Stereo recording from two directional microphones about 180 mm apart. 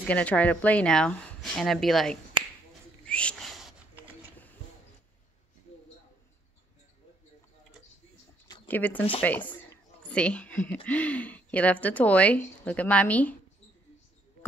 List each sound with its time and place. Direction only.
0.0 s speech: 10° left (ahead or behind)
2.4 s finger snapping: 30° right (ahead or behind)
3.1 s a sound: 5° left (ahead or behind)
8.6 s speech: 10° left (ahead or behind)
9.5 s a sound: 10° left (ahead or behind)
10.7 s speech: 5° left (ahead or behind)